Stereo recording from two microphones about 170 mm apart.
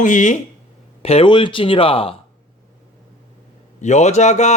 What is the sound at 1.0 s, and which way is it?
Speech, 35° left (ahead or behind).